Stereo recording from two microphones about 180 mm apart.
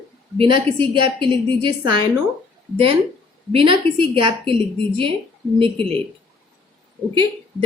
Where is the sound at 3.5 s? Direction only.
30° right (ahead or behind).